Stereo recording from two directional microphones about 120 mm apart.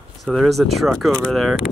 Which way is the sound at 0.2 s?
Centre (ahead or behind).